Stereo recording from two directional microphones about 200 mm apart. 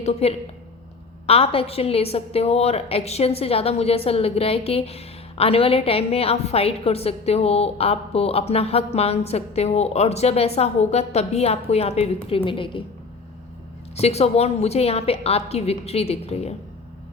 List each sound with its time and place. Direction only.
0.0 s a woman's voice: 30° left (ahead or behind)
13.9 s a woman's voice: 30° left (ahead or behind)